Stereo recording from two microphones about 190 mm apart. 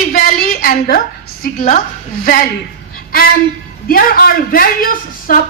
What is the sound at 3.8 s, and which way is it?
A woman's voice, 50° left (ahead or behind).